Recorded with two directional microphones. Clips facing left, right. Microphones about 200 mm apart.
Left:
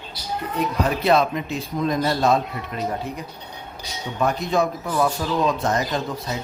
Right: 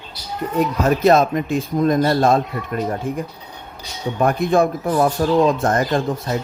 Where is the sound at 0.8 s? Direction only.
45° right (ahead or behind).